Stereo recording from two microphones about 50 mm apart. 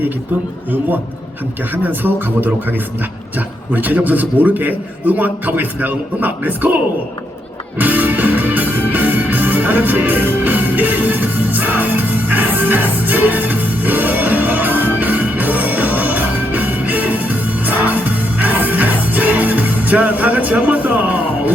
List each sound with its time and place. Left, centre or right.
1.7 s a man's voice: right
3.3 s a man's voice: right
7.8 s music: right